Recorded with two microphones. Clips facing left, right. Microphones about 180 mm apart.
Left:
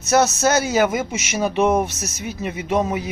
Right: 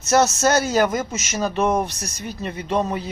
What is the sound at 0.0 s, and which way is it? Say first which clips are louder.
Speech: even; centre (ahead or behind).